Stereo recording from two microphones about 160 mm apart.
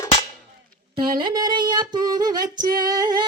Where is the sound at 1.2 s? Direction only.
25° right (ahead or behind).